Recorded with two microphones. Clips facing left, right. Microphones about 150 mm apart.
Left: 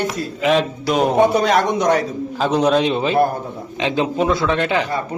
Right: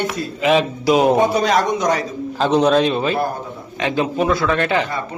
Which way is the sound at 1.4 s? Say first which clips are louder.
Left 1 dB; 55° left (ahead or behind).